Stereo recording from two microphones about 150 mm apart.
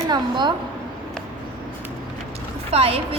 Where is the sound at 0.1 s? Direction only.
30° right (ahead or behind).